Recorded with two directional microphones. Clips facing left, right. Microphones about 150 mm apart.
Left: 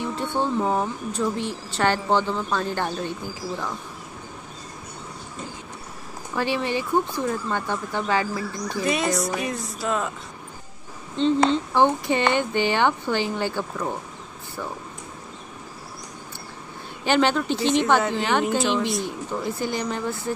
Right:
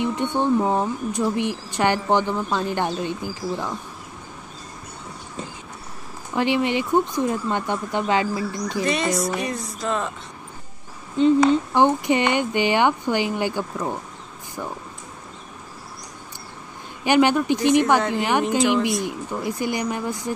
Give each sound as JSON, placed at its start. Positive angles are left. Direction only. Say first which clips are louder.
{"t": 0.0, "sound": "speech", "louder": "right 3 dB", "side_deg": -15}
{"t": 6.3, "sound": "speech", "louder": "right 4 dB", "side_deg": -20}
{"t": 8.8, "sound": "speech", "louder": "even", "side_deg": 0}
{"t": 11.2, "sound": "speech", "louder": "right 4 dB", "side_deg": -10}
{"t": 17.0, "sound": "speech", "louder": "right 3 dB", "side_deg": -15}